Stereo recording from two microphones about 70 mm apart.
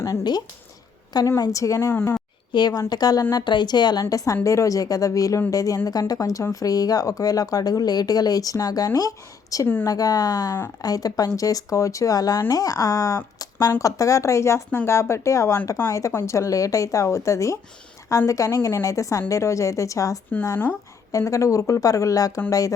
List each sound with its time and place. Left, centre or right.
0.0 s speech: left
1.4 s speech: left
1.9 s speech: left
2.5 s a woman's voice: left
2.9 s speech: left
3.3 s speech: left
4.4 s speech: left